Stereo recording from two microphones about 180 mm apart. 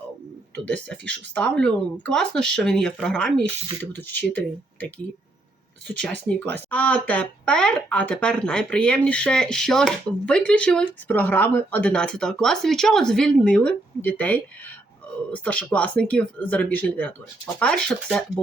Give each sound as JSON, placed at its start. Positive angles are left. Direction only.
{"t": 0.9, "sound": "speech", "side_deg": 5}
{"t": 5.9, "sound": "speech", "side_deg": 5}